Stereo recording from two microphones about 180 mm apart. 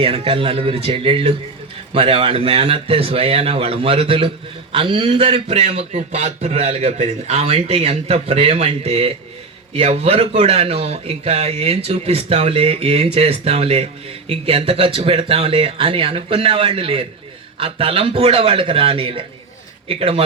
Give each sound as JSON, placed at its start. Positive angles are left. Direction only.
{"t": 0.0, "sound": "speech", "side_deg": -30}